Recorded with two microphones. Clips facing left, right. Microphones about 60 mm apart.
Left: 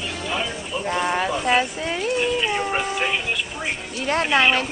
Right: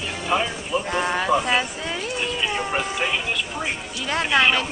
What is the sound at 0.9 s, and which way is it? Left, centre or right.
Speech, centre.